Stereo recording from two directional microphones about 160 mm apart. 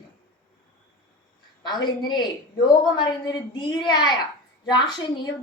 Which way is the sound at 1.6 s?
25° left (ahead or behind).